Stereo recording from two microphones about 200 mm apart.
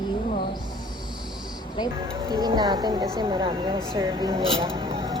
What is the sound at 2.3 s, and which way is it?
Speech, 20° right (ahead or behind).